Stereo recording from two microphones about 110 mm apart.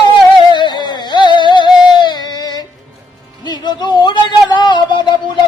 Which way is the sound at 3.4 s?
40° left (ahead or behind).